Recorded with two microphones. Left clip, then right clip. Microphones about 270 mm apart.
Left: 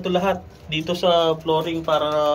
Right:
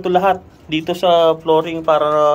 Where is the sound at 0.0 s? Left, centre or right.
Centre.